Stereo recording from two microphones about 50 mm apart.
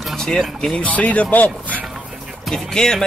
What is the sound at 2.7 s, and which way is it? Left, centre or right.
Speech, centre.